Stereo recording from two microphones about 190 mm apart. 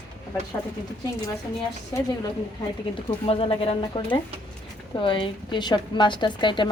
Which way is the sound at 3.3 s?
30° left (ahead or behind).